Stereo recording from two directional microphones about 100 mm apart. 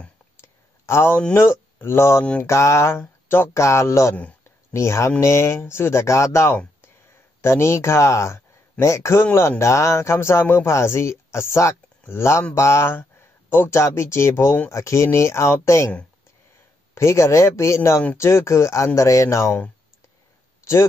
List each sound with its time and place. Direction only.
0.4 s a sound: 25° left (ahead or behind)
1.3 s speech: 25° left (ahead or behind)
16.9 s speech: 30° left (ahead or behind)